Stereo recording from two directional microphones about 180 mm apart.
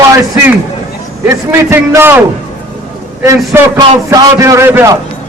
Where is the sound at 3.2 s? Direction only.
15° right (ahead or behind).